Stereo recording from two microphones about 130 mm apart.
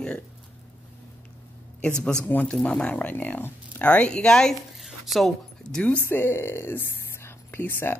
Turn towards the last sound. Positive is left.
turn(degrees=15)  # may be behind; listen again after turning